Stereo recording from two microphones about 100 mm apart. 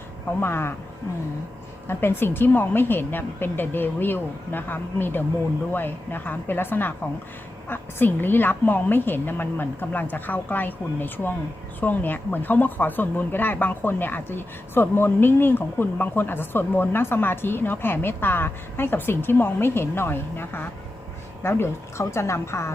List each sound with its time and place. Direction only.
0.3 s speech: 25° left (ahead or behind)
1.9 s speech: 20° left (ahead or behind)